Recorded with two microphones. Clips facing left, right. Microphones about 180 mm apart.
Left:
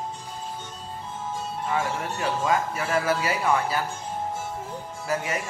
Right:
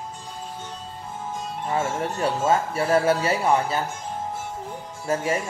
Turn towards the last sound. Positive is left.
turn(degrees=-30)  # may be behind; listen again after turning